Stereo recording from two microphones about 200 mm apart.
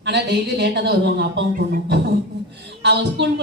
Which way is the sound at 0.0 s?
60° right (ahead or behind).